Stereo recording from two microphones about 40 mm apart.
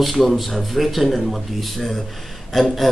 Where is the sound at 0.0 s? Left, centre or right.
Centre.